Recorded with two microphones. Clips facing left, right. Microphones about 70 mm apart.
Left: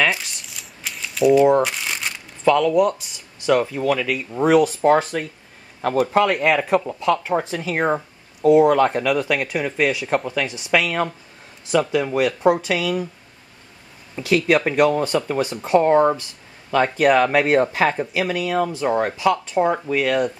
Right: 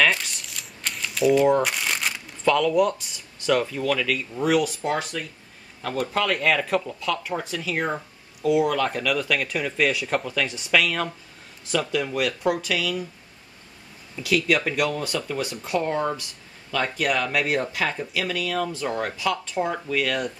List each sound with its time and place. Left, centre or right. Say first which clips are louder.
0.0 s crumpling: left 1 dB; centre
2.4 s speech: left 4 dB; centre
4.4 s speech: left 7 dB; left
6.1 s speech: left 3 dB; left
14.1 s speech: left 5 dB; left